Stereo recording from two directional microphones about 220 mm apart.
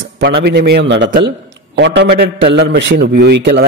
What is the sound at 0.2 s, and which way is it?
A man's voice, 50° right (ahead or behind).